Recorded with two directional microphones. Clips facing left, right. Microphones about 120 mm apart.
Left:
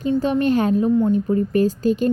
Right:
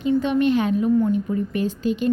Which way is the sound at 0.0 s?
40° left (ahead or behind).